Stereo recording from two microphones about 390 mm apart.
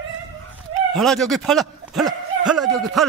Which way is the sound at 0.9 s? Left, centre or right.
Centre.